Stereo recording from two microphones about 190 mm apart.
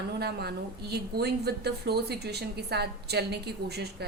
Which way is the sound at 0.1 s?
60° right (ahead or behind).